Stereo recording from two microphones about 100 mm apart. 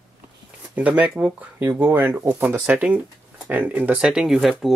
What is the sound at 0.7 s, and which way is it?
Speech, 15° right (ahead or behind).